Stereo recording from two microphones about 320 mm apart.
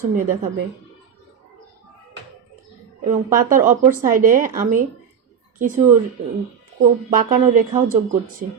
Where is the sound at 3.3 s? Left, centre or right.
Right.